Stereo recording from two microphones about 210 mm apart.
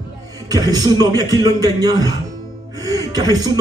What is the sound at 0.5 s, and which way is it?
Speech, 15° right (ahead or behind).